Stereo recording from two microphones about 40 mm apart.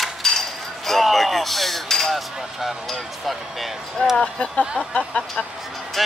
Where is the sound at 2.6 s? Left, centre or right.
Centre.